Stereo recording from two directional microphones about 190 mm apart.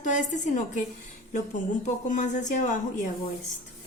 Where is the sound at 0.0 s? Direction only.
40° left (ahead or behind).